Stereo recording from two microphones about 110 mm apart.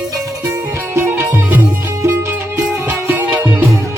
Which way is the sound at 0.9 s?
20° right (ahead or behind).